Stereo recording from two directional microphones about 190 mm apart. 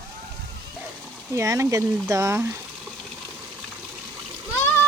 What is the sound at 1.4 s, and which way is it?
Speech, 15° right (ahead or behind).